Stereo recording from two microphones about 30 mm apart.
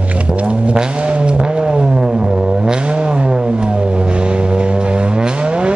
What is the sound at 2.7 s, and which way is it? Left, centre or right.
Vehicle, right.